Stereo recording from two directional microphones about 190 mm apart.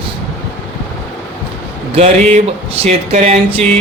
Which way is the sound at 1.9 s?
35° right (ahead or behind).